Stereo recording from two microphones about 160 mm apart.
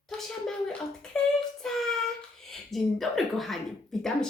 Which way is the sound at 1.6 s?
5° left (ahead or behind).